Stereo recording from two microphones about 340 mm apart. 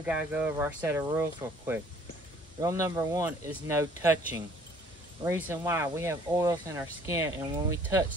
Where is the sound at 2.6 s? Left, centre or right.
Centre.